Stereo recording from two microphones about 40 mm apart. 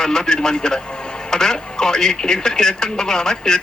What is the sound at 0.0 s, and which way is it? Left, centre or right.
Speech, centre.